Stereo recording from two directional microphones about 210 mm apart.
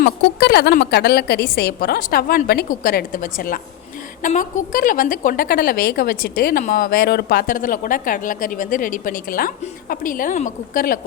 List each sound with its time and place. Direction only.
0.0 s a woman's voice: 50° left (ahead or behind)